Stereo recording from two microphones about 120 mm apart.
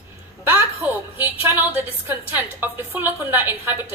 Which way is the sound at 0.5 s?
15° right (ahead or behind).